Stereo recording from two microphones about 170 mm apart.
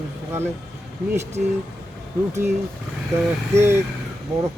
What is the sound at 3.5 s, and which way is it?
Speech, 15° right (ahead or behind).